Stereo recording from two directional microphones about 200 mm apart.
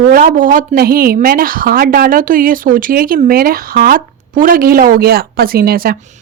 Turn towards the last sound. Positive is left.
turn(degrees=-50)  # may be behind; listen again after turning